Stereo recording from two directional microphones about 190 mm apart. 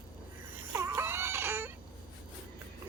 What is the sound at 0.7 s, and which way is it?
Baby cry, 15° right (ahead or behind).